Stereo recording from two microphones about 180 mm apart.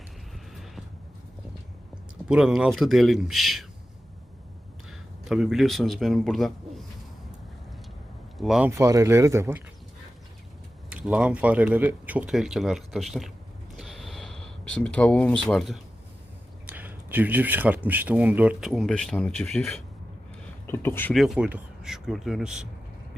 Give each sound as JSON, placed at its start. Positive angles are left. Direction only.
{"t": 2.2, "sound": "speech", "side_deg": -5}
{"t": 4.9, "sound": "speech", "side_deg": 0}
{"t": 8.4, "sound": "speech", "side_deg": -5}
{"t": 8.7, "sound": "speech", "side_deg": -15}
{"t": 10.8, "sound": "speech", "side_deg": -5}
{"t": 13.7, "sound": "a sound", "side_deg": 0}
{"t": 15.4, "sound": "speech", "side_deg": 0}
{"t": 16.6, "sound": "a sound", "side_deg": -10}
{"t": 17.8, "sound": "speech", "side_deg": -10}
{"t": 21.2, "sound": "speech", "side_deg": -5}